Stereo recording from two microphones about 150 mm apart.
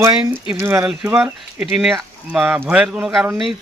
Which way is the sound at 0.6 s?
15° right (ahead or behind).